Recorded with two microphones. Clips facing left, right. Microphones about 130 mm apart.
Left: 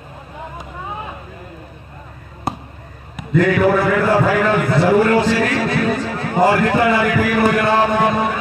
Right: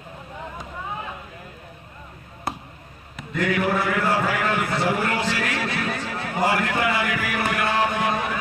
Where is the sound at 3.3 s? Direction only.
40° left (ahead or behind).